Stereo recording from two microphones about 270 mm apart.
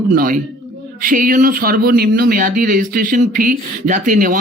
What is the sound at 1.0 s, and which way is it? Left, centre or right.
Speech, right.